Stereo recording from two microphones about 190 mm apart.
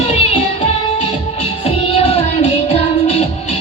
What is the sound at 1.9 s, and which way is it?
Music, 30° left (ahead or behind).